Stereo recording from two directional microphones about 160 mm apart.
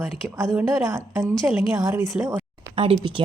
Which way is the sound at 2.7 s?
35° right (ahead or behind).